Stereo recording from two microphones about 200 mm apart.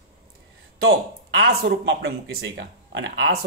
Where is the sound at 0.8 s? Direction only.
60° right (ahead or behind).